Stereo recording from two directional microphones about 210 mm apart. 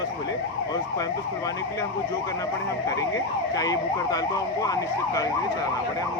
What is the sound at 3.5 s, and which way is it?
Speech, 15° left (ahead or behind).